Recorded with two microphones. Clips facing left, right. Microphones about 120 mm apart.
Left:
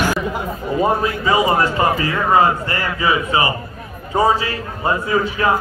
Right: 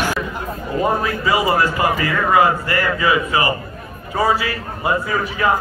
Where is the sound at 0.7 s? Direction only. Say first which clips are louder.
Left 1 dB; 20° left (ahead or behind).